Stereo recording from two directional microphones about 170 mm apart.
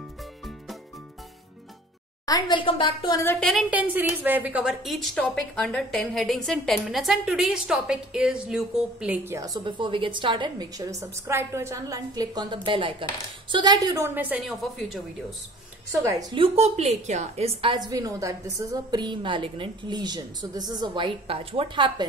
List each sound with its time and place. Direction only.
2.2 s a woman's voice: 25° left (ahead or behind)
3.3 s speech: centre (ahead or behind)
3.7 s a woman's voice: 10° right (ahead or behind)
14.6 s speech: centre (ahead or behind)
15.9 s a woman's voice: 20° right (ahead or behind)
16.5 s a woman's voice: 40° right (ahead or behind)